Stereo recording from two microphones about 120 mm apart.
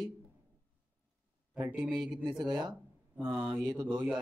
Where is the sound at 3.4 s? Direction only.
10° right (ahead or behind).